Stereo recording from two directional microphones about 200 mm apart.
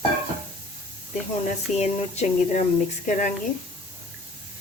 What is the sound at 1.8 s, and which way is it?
Speech, 35° left (ahead or behind).